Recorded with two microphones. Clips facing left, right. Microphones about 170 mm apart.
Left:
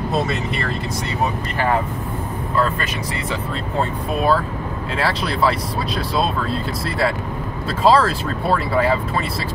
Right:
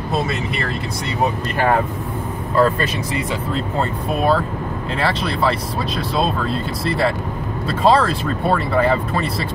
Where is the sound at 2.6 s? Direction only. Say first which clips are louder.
Right 5 dB; 35° right (ahead or behind).